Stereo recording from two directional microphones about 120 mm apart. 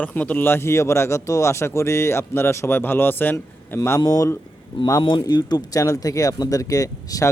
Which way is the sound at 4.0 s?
30° left (ahead or behind).